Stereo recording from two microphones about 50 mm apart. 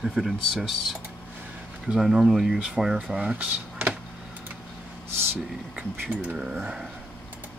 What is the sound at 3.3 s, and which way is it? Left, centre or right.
Speech, right.